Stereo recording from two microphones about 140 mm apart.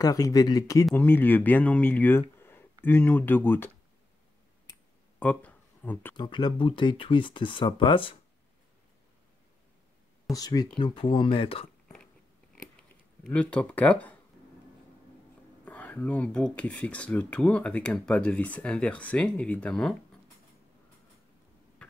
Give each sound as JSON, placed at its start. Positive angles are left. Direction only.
{"t": 0.0, "sound": "speech", "side_deg": 25}
{"t": 0.9, "sound": "speech", "side_deg": 15}
{"t": 5.2, "sound": "a sound", "side_deg": 10}
{"t": 6.1, "sound": "speech", "side_deg": 35}
{"t": 10.3, "sound": "speech", "side_deg": 25}
{"t": 13.2, "sound": "speech", "side_deg": 10}
{"t": 15.6, "sound": "speech", "side_deg": 10}